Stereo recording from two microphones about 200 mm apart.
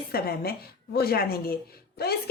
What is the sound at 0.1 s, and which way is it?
A woman's voice, 50° left (ahead or behind).